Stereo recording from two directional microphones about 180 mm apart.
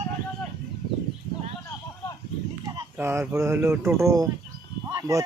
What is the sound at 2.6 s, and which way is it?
Speech, 15° right (ahead or behind).